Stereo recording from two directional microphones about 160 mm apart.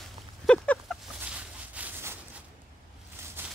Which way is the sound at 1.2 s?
10° right (ahead or behind).